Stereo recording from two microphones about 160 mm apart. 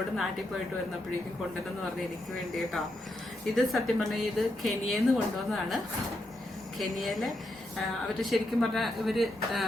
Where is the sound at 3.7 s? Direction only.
Centre (ahead or behind).